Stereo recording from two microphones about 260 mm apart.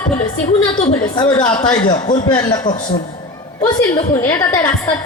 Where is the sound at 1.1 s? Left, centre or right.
Centre.